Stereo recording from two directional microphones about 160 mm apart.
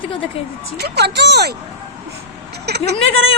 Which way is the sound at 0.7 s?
90° right.